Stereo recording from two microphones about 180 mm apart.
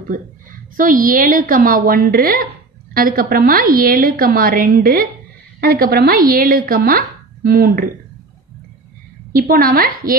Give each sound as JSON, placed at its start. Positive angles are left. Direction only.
{"t": 0.1, "sound": "a woman's voice", "side_deg": -50}
{"t": 9.3, "sound": "a woman's voice", "side_deg": -55}